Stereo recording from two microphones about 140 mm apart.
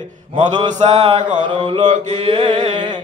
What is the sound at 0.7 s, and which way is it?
Speech, 55° right (ahead or behind).